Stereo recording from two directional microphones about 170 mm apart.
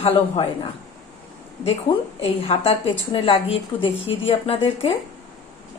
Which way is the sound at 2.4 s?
35° left (ahead or behind).